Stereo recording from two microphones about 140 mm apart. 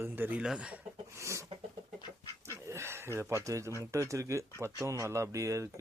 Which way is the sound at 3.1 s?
20° right (ahead or behind).